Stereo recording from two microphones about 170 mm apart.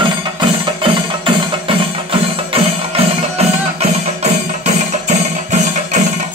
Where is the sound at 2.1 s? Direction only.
35° right (ahead or behind).